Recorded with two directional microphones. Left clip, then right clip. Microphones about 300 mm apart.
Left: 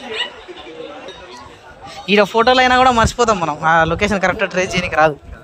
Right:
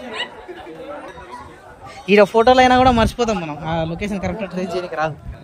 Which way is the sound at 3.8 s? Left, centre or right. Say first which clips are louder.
Left 9 dB; centre.